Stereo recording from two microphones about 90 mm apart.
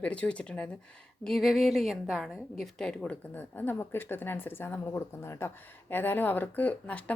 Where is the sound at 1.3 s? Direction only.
Centre (ahead or behind).